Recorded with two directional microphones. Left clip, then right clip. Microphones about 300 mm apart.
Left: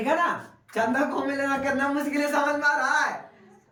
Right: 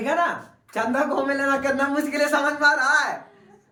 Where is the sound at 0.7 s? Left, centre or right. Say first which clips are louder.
Right 2 dB; centre.